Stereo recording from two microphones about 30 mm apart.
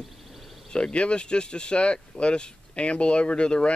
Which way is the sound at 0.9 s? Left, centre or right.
Left.